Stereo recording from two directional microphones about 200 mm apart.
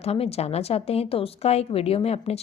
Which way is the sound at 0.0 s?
30° left (ahead or behind).